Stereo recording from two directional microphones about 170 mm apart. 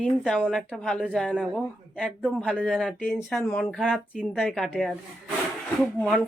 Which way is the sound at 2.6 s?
5° left (ahead or behind).